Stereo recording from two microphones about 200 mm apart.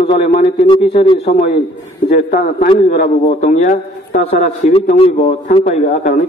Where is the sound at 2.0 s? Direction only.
55° left (ahead or behind).